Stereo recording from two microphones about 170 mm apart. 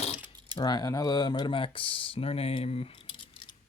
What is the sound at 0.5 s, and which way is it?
Speech, 25° left (ahead or behind).